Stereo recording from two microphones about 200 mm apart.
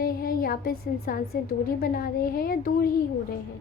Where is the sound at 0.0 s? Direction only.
45° left (ahead or behind).